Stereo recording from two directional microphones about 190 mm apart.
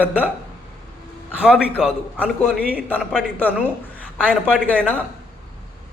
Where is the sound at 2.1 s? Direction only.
10° left (ahead or behind).